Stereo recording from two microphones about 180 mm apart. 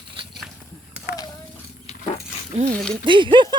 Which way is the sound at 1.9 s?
35° left (ahead or behind).